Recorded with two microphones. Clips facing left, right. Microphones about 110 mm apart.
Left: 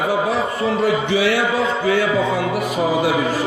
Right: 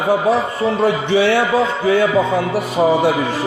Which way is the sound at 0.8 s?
30° right (ahead or behind).